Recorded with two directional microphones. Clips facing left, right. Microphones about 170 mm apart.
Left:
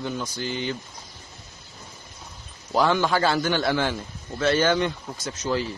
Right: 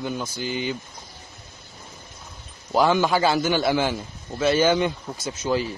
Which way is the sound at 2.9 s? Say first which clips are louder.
Right 2 dB; 10° right (ahead or behind).